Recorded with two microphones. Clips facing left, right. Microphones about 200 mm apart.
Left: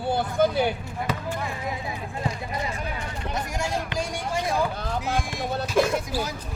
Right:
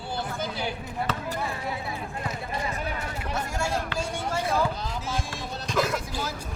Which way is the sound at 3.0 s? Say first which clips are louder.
Left 1 dB; 5° right (ahead or behind).